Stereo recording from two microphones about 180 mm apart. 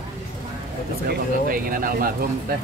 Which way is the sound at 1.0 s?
55° right (ahead or behind).